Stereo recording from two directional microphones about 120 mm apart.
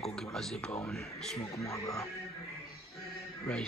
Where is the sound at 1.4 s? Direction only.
25° left (ahead or behind).